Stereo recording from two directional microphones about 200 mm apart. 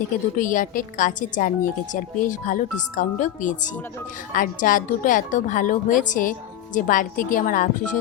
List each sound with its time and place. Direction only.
0.3 s a woman's voice: 40° left (ahead or behind)